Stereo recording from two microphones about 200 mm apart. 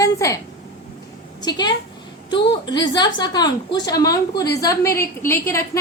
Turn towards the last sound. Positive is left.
turn(degrees=15)  # may be behind; listen again after turning